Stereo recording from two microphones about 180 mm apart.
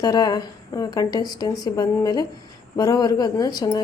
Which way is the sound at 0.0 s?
20° left (ahead or behind).